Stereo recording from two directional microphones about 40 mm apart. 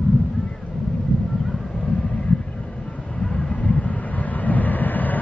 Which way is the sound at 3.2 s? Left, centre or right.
Left.